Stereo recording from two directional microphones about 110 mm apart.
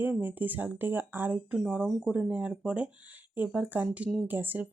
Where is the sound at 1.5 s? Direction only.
5° right (ahead or behind).